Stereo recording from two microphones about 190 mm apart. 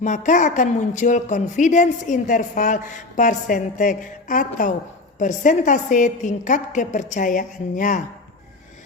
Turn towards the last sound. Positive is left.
turn(degrees=45)  # may be behind; listen again after turning